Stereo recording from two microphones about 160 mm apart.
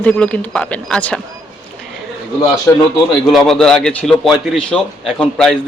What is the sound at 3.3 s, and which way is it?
A man's voice, 5° left (ahead or behind).